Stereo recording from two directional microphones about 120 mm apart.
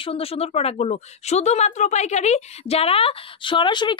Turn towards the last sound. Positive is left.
turn(degrees=40)  # may be behind; listen again after turning